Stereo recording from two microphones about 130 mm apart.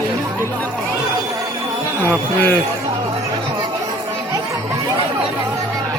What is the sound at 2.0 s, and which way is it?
Speech, 15° left (ahead or behind).